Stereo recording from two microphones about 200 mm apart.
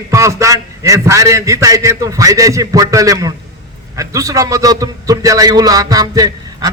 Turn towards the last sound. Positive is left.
turn(degrees=-20)  # may be behind; listen again after turning